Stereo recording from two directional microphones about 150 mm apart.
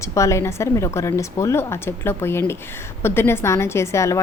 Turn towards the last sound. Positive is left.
turn(degrees=20)  # may be behind; listen again after turning